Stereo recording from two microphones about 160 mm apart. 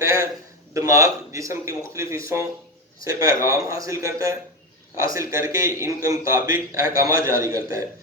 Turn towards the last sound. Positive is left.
turn(degrees=-20)  # may be behind; listen again after turning